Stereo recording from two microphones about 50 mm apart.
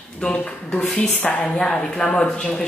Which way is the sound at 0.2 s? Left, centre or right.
Centre.